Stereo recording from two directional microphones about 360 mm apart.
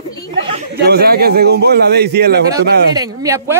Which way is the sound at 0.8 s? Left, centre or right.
Right.